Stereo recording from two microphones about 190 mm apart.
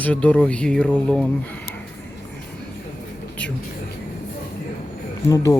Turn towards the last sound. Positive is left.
turn(degrees=20)  # may be behind; listen again after turning